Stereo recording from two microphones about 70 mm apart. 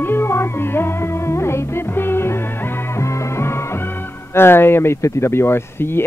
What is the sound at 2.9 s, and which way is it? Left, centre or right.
Music, left.